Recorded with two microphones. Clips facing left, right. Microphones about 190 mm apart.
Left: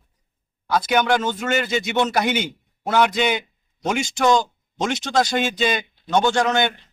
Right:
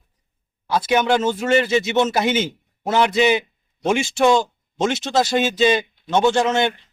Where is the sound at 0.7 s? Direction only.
30° right (ahead or behind).